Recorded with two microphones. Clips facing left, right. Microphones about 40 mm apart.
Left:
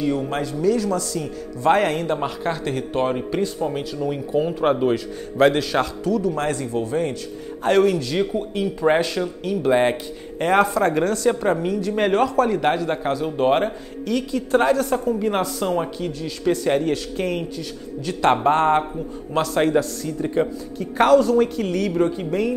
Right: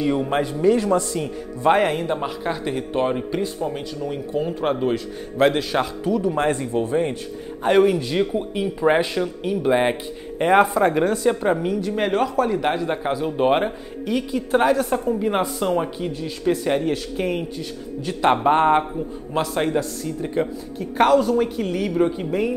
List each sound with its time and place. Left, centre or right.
0.0 s a man's voice: right
1.6 s a man's voice: centre
16.4 s a man's voice: centre
19.3 s a man's voice: centre